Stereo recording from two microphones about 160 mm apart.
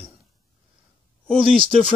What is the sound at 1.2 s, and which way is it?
Speech, 5° left (ahead or behind).